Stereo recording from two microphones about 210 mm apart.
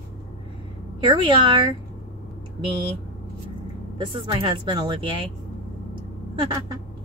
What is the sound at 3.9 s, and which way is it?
Speech, 25° right (ahead or behind).